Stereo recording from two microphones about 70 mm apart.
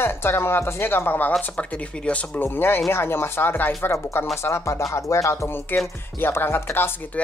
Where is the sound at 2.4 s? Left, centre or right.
Left.